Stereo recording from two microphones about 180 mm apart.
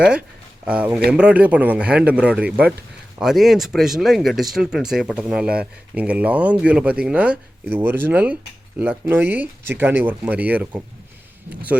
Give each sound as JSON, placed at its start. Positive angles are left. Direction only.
{"t": 0.6, "sound": "speech", "side_deg": -5}